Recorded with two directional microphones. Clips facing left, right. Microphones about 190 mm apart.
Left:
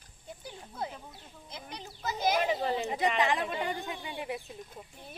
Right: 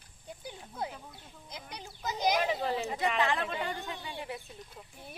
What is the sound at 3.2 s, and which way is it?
Speech, 15° left (ahead or behind).